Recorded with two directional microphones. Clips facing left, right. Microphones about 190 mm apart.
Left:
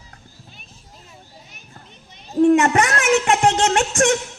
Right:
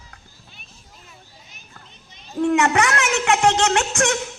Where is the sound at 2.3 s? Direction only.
40° left (ahead or behind).